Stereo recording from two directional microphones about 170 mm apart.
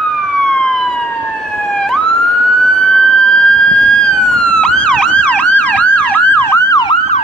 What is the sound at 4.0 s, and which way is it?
Emergency vehicle, 5° left (ahead or behind).